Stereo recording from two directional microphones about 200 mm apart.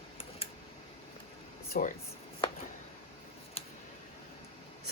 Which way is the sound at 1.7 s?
40° left (ahead or behind).